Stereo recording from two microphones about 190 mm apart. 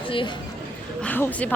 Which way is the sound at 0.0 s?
25° left (ahead or behind).